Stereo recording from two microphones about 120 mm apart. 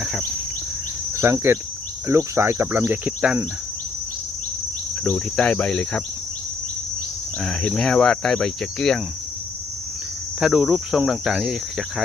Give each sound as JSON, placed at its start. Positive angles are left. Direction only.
{"t": 1.1, "sound": "cricket", "side_deg": -20}
{"t": 2.0, "sound": "speech", "side_deg": -25}
{"t": 5.0, "sound": "cricket", "side_deg": 10}
{"t": 7.4, "sound": "speech", "side_deg": 5}
{"t": 10.4, "sound": "speech", "side_deg": -5}